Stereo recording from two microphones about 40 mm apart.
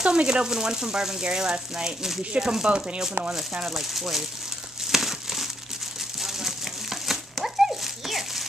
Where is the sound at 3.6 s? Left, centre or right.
Centre.